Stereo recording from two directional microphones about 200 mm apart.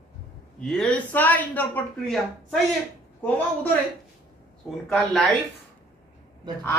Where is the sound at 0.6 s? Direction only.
5° left (ahead or behind).